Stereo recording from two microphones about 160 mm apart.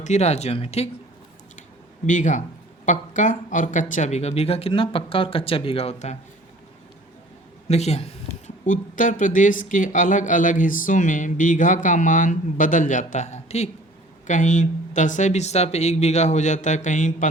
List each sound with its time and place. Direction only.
0.0 s speech: 45° left (ahead or behind)
2.0 s speech: 50° left (ahead or behind)
7.7 s speech: 45° left (ahead or behind)
8.6 s speech: 55° left (ahead or behind)